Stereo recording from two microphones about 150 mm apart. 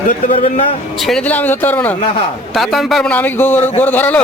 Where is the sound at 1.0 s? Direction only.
5° left (ahead or behind).